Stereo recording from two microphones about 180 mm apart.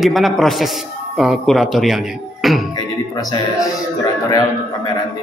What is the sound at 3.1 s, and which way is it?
Speech, 20° left (ahead or behind).